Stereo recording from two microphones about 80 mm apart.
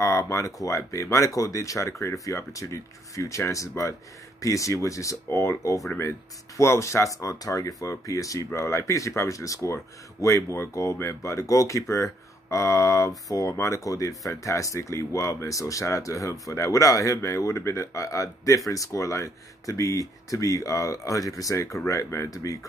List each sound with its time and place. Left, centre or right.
0.0 s speech: left